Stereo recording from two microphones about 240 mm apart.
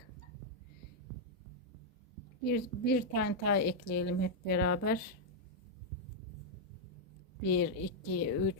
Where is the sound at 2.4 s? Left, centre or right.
Left.